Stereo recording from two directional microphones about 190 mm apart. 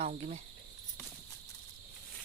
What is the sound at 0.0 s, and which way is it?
Cricket, 35° right (ahead or behind).